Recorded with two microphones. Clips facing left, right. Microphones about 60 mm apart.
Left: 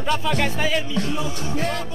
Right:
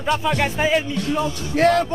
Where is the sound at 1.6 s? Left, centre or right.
Right.